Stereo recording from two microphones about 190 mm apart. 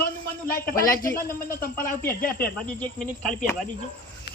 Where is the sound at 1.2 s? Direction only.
50° left (ahead or behind).